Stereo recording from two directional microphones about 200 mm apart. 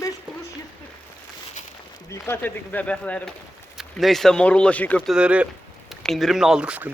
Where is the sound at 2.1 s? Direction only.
10° left (ahead or behind).